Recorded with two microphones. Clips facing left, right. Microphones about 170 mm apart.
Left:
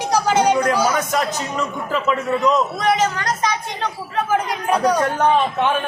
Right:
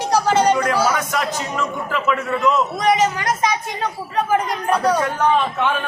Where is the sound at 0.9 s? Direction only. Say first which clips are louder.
Left 2 dB; 40° left (ahead or behind).